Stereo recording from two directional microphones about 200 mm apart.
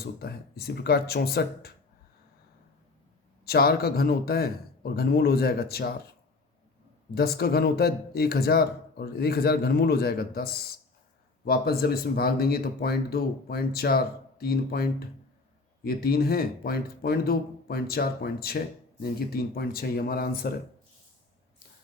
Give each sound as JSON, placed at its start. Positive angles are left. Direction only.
{"t": 0.0, "sound": "speech", "side_deg": 50}
{"t": 3.4, "sound": "speech", "side_deg": 50}
{"t": 7.1, "sound": "speech", "side_deg": 50}